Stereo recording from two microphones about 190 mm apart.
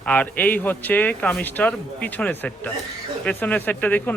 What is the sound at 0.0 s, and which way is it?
Speech, 10° left (ahead or behind).